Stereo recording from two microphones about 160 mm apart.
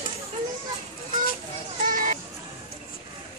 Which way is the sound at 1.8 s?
55° right (ahead or behind).